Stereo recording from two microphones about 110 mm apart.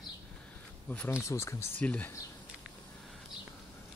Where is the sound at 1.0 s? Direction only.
25° left (ahead or behind).